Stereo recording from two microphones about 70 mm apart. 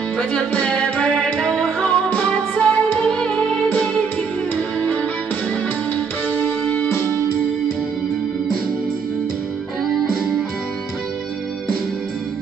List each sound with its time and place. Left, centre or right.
0.2 s music: centre
5.9 s music: left
6.9 s music: left